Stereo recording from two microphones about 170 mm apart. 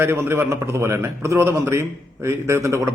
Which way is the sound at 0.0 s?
15° right (ahead or behind).